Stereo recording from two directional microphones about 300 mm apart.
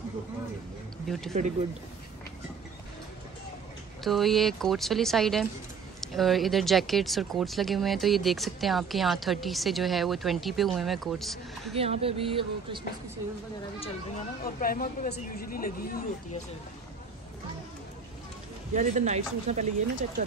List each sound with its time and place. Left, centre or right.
1.1 s speech: centre
4.0 s speech: centre
11.7 s speech: centre
13.7 s speech: left
18.7 s speech: right